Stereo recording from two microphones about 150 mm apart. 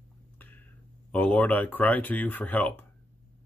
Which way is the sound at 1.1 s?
10° left (ahead or behind).